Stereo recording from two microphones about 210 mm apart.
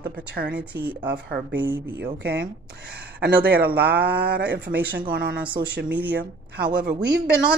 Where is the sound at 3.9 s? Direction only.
5° right (ahead or behind).